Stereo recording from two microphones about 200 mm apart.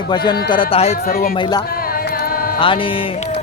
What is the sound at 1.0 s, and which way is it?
Speech, 50° left (ahead or behind).